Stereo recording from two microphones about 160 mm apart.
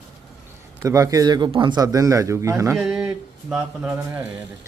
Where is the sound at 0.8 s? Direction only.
20° right (ahead or behind).